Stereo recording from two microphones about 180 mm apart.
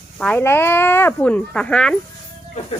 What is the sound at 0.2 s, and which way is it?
Speech, 10° left (ahead or behind).